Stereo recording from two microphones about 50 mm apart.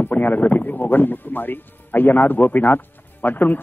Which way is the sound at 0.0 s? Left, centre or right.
Left.